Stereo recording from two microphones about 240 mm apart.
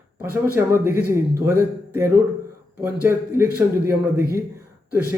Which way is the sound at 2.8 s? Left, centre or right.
Centre.